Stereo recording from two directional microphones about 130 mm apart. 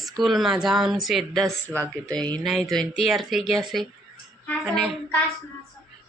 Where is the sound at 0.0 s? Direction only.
Centre (ahead or behind).